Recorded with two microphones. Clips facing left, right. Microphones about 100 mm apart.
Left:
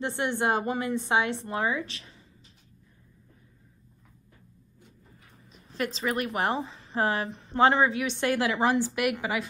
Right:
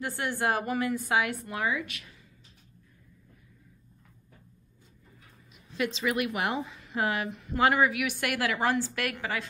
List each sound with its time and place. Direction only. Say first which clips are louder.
0.0 s a woman's voice: left 2 dB; 20° left (ahead or behind)
5.5 s a woman's voice: right 1 dB; 40° left (ahead or behind); by 9.4 s 15° left (ahead or behind)